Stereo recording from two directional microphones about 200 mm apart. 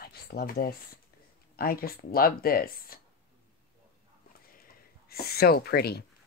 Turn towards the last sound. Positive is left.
turn(degrees=50)  # may be behind; listen again after turning